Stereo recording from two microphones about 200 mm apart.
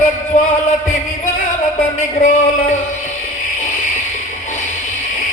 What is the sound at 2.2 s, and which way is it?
Speech, 35° left (ahead or behind).